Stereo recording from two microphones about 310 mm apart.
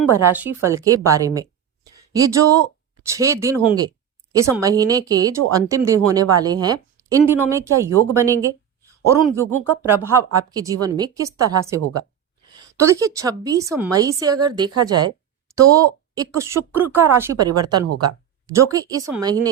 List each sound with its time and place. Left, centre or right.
0.1 s speech: centre
9.8 s speech: centre
17.8 s speech: right
18.5 s speech: centre